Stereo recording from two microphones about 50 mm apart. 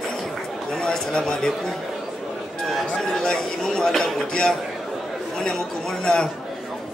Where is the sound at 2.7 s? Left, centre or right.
Centre.